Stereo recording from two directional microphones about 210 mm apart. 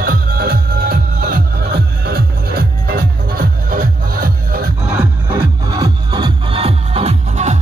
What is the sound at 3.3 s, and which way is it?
Music, 45° right (ahead or behind).